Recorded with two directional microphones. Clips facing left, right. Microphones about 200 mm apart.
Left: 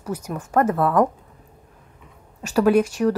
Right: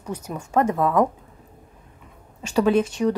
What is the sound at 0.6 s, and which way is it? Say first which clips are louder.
Speech: left 1 dB; 10° right (ahead or behind).